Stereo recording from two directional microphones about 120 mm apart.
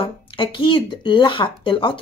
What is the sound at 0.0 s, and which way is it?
Speech, 45° left (ahead or behind).